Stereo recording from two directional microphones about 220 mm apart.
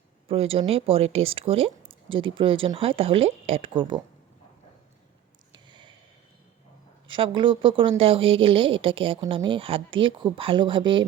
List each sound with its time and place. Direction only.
0.3 s speech: 25° right (ahead or behind)
5.5 s a sound: 20° right (ahead or behind)
7.1 s speech: 20° right (ahead or behind)